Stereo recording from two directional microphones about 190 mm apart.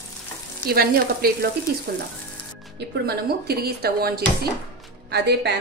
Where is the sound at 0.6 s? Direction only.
55° right (ahead or behind).